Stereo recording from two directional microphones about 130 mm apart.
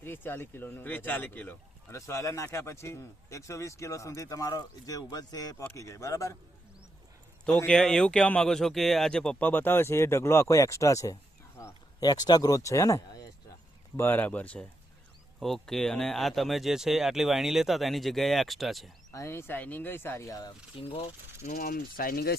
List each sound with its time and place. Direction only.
0.0 s speech: 15° left (ahead or behind)
7.6 s speech: 5° left (ahead or behind)
19.1 s speech: 20° left (ahead or behind)
20.8 s speech: 50° left (ahead or behind)
21.6 s speech: 90° left